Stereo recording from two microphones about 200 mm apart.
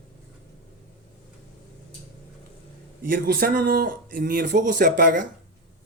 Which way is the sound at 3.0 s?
45° right (ahead or behind).